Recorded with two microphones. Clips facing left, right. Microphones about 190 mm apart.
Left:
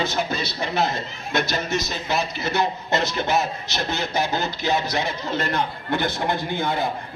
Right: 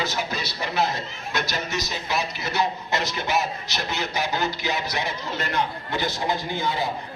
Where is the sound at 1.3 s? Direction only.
25° left (ahead or behind).